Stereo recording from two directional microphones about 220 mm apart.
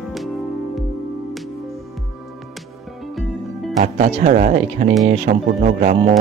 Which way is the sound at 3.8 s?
35° right (ahead or behind).